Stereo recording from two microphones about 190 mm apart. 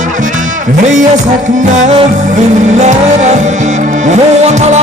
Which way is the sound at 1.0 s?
40° right (ahead or behind).